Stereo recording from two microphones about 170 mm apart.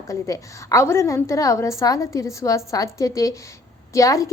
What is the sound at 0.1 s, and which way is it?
A woman's voice, 20° left (ahead or behind).